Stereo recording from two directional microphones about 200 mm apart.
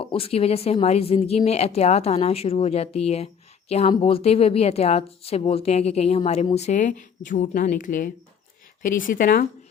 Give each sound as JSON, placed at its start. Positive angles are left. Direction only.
{"t": 0.0, "sound": "a woman's voice", "side_deg": 30}